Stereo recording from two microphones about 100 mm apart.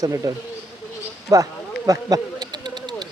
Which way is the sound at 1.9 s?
40° right (ahead or behind).